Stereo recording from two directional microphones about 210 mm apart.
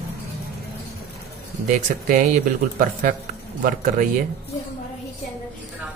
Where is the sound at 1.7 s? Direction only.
40° right (ahead or behind).